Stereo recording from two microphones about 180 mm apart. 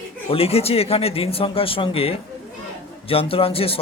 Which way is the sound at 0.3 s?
35° left (ahead or behind).